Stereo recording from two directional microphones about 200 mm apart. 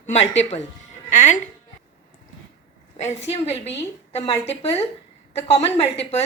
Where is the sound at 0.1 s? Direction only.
35° left (ahead or behind).